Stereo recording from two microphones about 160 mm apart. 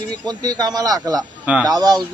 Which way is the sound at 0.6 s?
25° right (ahead or behind).